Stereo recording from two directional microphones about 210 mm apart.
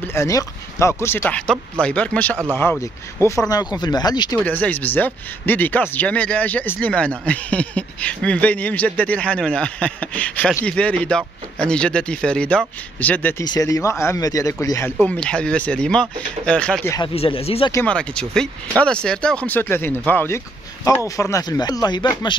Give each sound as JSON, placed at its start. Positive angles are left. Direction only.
{"t": 0.1, "sound": "speech", "side_deg": 15}
{"t": 4.5, "sound": "speech", "side_deg": 10}
{"t": 16.9, "sound": "speech", "side_deg": 25}
{"t": 17.6, "sound": "speech", "side_deg": 10}